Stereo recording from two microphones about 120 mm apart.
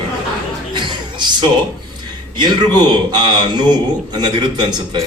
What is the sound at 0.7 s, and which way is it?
A man's voice, 40° right (ahead or behind).